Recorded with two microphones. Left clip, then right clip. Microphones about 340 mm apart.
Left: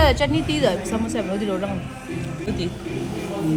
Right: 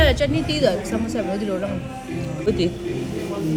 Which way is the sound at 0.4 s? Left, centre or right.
Left.